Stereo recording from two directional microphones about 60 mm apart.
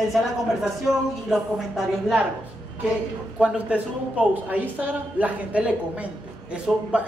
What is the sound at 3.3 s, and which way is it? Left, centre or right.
A man's voice, centre.